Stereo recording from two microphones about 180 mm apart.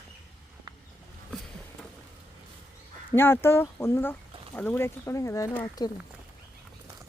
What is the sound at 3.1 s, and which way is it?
Speech, 15° left (ahead or behind).